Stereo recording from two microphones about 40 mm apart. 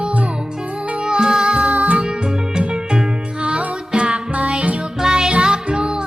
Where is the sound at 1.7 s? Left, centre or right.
Right.